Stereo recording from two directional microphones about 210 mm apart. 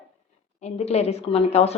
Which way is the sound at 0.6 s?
30° left (ahead or behind).